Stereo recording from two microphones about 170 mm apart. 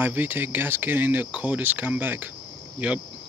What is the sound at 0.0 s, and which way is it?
Speech, 10° right (ahead or behind).